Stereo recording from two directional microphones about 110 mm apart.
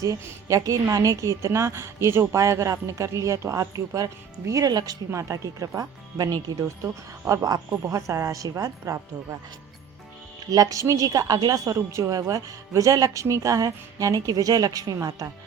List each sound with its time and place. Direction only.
0.0 s a woman's voice: 30° right (ahead or behind)
10.5 s a woman's voice: 30° right (ahead or behind)